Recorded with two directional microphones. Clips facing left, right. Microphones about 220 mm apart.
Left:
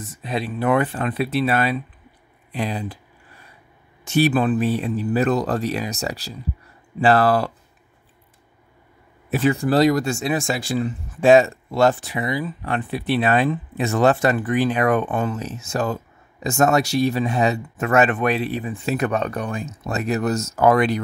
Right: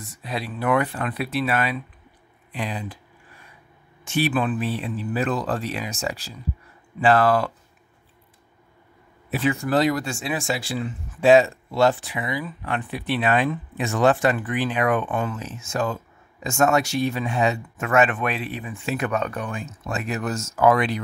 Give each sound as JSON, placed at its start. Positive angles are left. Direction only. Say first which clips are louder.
{"t": 0.2, "sound": "speech", "louder": "left 4 dB", "side_deg": 25}
{"t": 4.0, "sound": "speech", "louder": "left 5 dB", "side_deg": 40}
{"t": 9.3, "sound": "speech", "louder": "left 3 dB", "side_deg": 40}